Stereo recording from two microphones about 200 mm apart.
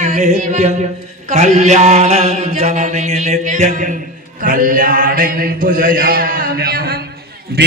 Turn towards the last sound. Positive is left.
turn(degrees=-55)  # may be behind; listen again after turning